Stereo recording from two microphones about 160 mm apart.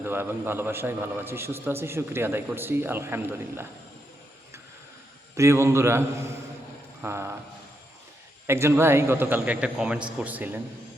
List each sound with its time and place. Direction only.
0.0 s a man's voice: 15° right (ahead or behind)
5.4 s a man's voice: 20° right (ahead or behind)
8.4 s a man's voice: 15° right (ahead or behind)